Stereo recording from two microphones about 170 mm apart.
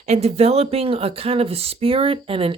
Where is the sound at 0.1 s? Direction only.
40° right (ahead or behind).